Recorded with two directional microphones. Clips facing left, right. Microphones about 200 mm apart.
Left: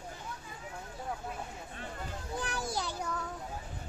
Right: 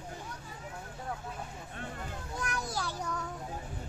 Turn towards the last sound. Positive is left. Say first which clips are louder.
# even
turn(degrees=5)  # may be behind; listen again after turning